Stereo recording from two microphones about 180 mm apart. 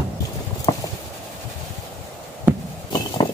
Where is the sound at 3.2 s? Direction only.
30° left (ahead or behind).